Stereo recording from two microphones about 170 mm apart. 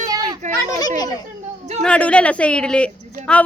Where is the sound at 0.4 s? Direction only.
45° right (ahead or behind).